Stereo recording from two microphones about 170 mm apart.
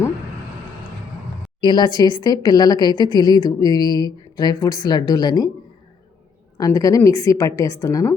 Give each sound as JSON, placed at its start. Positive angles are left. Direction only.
{"t": 1.6, "sound": "speech", "side_deg": 25}
{"t": 6.6, "sound": "speech", "side_deg": 20}